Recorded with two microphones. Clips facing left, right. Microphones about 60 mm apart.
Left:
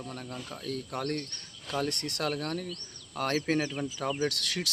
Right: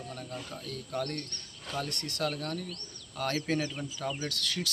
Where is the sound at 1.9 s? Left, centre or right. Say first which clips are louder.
Left 1 dB; left.